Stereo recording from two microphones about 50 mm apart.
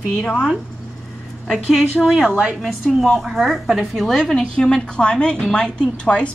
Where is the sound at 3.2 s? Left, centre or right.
Centre; by 6.3 s left.